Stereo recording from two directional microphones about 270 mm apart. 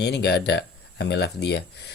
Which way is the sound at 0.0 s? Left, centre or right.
Left.